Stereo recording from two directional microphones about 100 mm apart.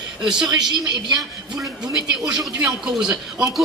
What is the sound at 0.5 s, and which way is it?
Speech, 45° right (ahead or behind).